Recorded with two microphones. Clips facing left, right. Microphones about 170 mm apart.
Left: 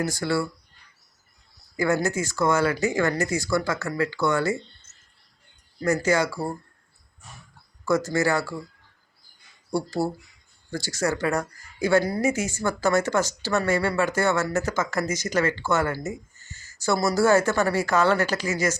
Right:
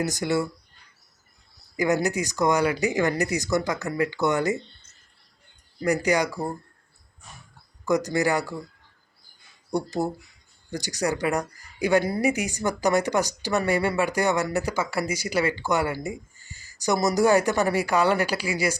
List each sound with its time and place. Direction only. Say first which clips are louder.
0.0 s speech: even; 20° right (ahead or behind)
1.7 s speech: even; 15° right (ahead or behind)
5.8 s speech: even; 15° right (ahead or behind)
7.9 s speech: even; 15° right (ahead or behind)
9.7 s speech: even; 20° right (ahead or behind)